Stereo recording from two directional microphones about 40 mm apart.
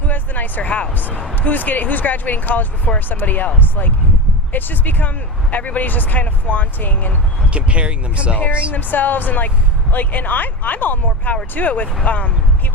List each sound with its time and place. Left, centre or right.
0.0 s a sound: left
0.9 s speech: left
7.5 s speech: right
8.7 s speech: left